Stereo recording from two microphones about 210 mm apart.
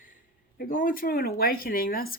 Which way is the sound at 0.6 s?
40° left (ahead or behind).